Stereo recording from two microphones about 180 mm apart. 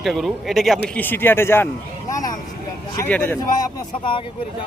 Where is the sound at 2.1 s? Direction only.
20° left (ahead or behind).